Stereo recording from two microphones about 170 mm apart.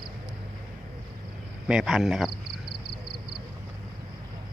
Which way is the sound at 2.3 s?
65° right (ahead or behind).